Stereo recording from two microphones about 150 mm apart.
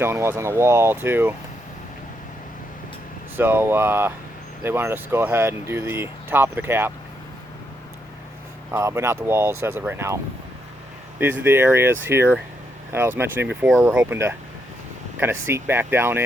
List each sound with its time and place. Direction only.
0.0 s speech: 15° right (ahead or behind)
3.3 s speech: 15° right (ahead or behind)
8.7 s speech: 15° right (ahead or behind)
11.2 s speech: 15° right (ahead or behind)
15.2 s speech: 15° right (ahead or behind)